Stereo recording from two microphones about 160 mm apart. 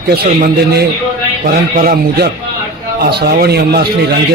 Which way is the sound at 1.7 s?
65° right (ahead or behind).